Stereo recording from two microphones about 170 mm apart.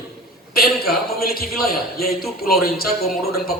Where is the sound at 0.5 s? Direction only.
65° left (ahead or behind).